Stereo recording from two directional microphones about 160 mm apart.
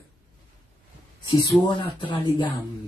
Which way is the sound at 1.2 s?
30° left (ahead or behind).